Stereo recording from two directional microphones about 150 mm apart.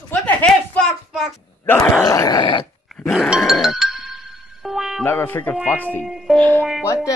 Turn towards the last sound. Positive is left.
turn(degrees=-10)  # may be behind; listen again after turning